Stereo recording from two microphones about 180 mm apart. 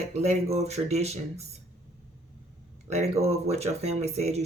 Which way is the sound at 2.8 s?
35° right (ahead or behind).